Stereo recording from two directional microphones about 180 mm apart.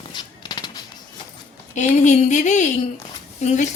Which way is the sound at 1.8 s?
40° left (ahead or behind).